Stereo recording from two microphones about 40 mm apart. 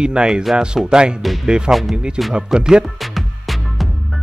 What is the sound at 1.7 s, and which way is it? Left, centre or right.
Speech, centre.